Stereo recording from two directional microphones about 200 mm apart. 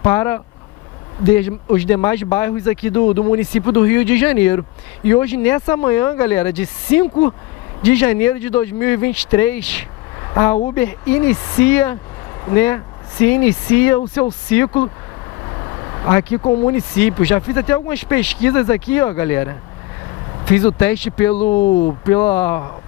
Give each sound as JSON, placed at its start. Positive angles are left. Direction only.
{"t": 0.0, "sound": "speech", "side_deg": 15}
{"t": 15.6, "sound": "vehicle", "side_deg": 20}
{"t": 16.4, "sound": "speech", "side_deg": 15}
{"t": 21.4, "sound": "speech", "side_deg": 35}
{"t": 22.0, "sound": "speech", "side_deg": 15}